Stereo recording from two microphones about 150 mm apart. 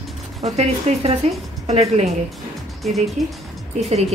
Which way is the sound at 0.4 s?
45° right (ahead or behind).